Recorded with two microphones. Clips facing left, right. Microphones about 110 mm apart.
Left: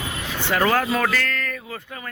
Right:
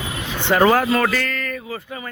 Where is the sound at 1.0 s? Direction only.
5° right (ahead or behind).